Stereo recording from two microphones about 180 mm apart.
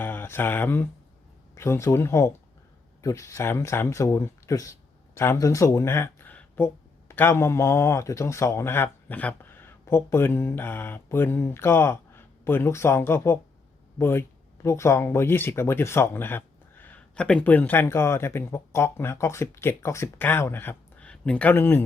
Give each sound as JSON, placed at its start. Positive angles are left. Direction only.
{"t": 0.0, "sound": "speech", "side_deg": 10}